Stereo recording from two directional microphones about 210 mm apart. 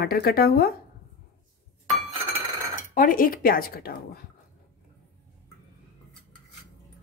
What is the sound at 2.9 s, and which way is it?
Speech, 40° left (ahead or behind).